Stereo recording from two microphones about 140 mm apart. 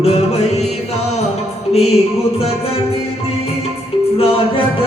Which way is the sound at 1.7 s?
50° left (ahead or behind).